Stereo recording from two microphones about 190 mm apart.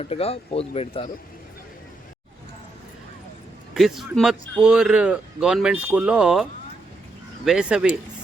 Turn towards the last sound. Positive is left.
turn(degrees=-5)  # may be behind; listen again after turning